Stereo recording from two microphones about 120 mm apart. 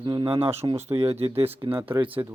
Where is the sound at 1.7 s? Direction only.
20° right (ahead or behind).